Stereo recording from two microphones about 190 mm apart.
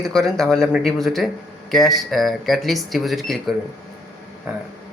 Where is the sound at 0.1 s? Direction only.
Centre (ahead or behind).